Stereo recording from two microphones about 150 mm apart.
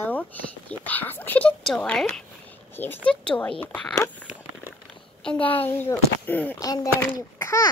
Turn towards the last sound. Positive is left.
turn(degrees=20)  # may be behind; listen again after turning